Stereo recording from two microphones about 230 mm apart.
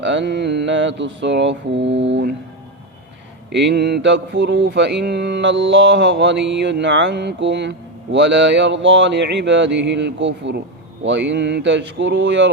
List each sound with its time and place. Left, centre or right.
0.0 s mantra: right
3.5 s mantra: right